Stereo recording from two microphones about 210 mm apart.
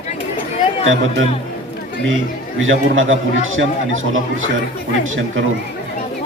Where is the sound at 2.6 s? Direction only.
70° right (ahead or behind).